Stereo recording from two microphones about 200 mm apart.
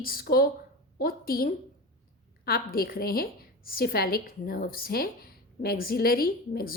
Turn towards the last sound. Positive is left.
turn(degrees=50)  # may be behind; listen again after turning